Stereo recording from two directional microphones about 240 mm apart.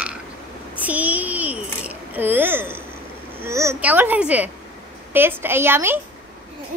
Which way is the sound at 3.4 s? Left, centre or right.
Centre.